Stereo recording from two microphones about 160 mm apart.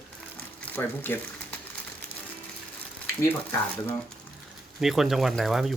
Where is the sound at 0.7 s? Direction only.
10° left (ahead or behind).